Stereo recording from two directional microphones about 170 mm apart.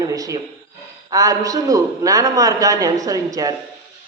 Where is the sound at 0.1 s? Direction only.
20° right (ahead or behind).